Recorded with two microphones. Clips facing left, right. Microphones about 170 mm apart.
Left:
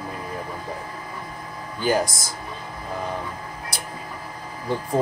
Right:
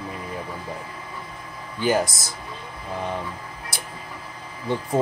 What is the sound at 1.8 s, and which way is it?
Speech, centre (ahead or behind).